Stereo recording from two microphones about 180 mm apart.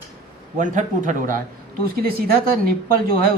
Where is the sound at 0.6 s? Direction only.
45° right (ahead or behind).